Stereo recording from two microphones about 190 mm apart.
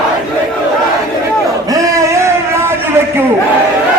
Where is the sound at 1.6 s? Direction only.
15° right (ahead or behind).